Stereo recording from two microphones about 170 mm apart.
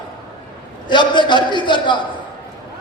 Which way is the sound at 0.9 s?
25° left (ahead or behind).